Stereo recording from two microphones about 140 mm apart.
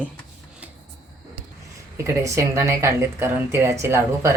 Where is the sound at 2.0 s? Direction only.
20° right (ahead or behind).